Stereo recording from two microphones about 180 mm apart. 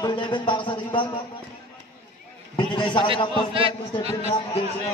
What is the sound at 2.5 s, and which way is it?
Speech, 25° left (ahead or behind).